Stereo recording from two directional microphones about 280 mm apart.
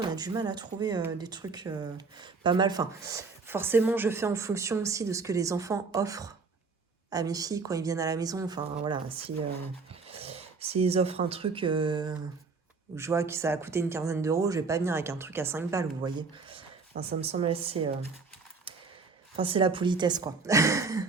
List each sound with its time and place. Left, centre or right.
0.0 s speech: centre
18.7 s mechanisms: centre
19.4 s speech: centre